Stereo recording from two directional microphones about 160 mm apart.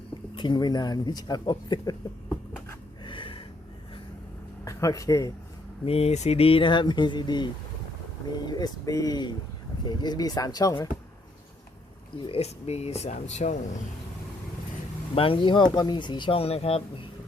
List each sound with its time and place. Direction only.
0.3 s speech: 30° left (ahead or behind)
3.0 s gasp: 30° left (ahead or behind)
4.6 s speech: 20° left (ahead or behind)
5.8 s speech: 40° left (ahead or behind)
8.4 s speech: 25° left (ahead or behind)
12.2 s speech: 40° left (ahead or behind)
15.1 s speech: 35° left (ahead or behind)